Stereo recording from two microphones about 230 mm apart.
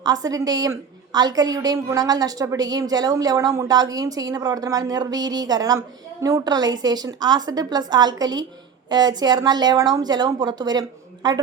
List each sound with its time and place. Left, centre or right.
0.0 s a woman's voice: centre